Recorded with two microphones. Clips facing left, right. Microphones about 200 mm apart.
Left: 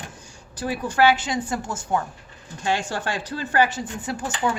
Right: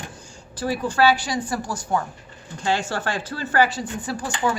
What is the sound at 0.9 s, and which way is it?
A woman's voice, 20° left (ahead or behind).